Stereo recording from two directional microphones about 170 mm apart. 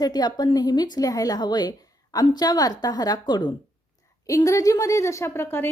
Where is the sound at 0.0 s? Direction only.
25° left (ahead or behind).